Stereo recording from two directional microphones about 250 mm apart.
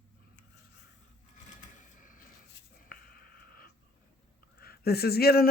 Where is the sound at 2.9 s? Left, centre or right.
Left.